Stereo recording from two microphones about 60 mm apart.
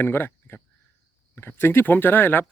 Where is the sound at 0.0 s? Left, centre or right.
Left.